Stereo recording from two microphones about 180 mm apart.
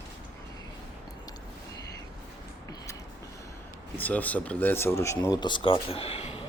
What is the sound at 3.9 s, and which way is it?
Speech, 10° left (ahead or behind).